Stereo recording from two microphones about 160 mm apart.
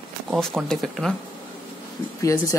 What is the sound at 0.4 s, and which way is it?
Speech, 5° left (ahead or behind).